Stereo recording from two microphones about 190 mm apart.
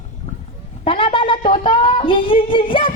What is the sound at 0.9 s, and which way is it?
Speech, 25° left (ahead or behind).